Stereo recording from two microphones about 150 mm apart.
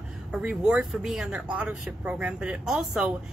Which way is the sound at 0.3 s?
5° right (ahead or behind).